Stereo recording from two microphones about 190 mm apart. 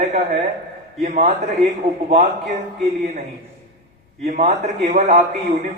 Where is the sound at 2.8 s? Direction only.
35° right (ahead or behind).